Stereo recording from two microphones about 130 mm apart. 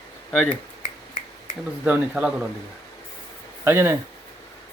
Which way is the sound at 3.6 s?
20° right (ahead or behind).